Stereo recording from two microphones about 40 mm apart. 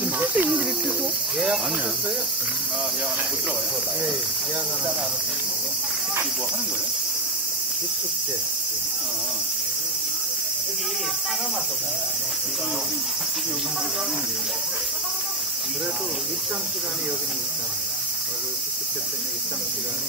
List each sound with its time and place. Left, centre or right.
0.0 s cricket: right